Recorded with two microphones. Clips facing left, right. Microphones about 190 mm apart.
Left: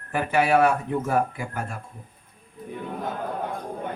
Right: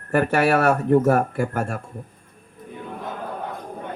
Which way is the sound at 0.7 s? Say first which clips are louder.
Right 8 dB; 60° right (ahead or behind).